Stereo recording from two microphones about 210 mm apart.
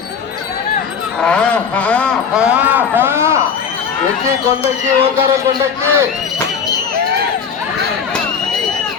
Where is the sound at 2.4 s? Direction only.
5° right (ahead or behind).